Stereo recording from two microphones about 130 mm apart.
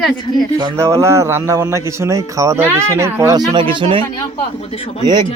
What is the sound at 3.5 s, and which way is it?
Speech, 40° right (ahead or behind).